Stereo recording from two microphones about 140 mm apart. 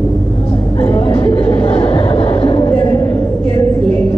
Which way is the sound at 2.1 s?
45° left (ahead or behind).